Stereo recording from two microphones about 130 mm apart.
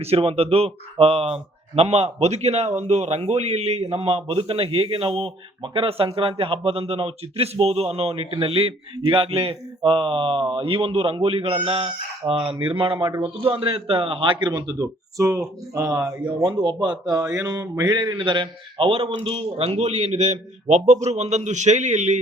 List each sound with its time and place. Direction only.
0.0 s a man's voice: 50° right (ahead or behind); by 16.1 s 25° right (ahead or behind)
16.4 s a man's voice: 40° right (ahead or behind)
17.3 s a sound: 25° right (ahead or behind)
17.7 s a man's voice: 30° right (ahead or behind); by 22.2 s 65° right (ahead or behind)